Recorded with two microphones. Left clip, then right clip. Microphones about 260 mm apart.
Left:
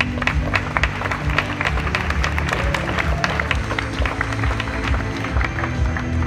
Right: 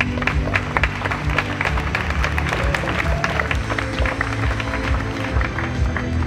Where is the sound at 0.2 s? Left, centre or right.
Left.